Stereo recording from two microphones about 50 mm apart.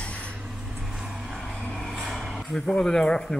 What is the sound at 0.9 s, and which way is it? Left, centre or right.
Vehicle, centre.